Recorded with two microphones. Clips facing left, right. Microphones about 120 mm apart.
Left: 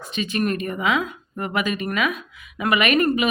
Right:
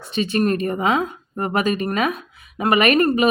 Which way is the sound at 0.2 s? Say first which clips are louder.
Right 4 dB; 35° right (ahead or behind).